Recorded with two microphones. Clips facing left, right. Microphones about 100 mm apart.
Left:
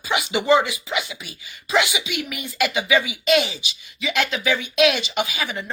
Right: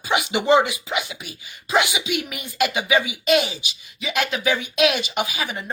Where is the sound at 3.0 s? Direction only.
45° right (ahead or behind).